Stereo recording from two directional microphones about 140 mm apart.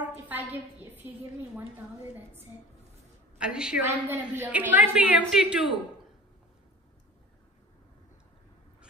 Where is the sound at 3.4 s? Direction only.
5° right (ahead or behind).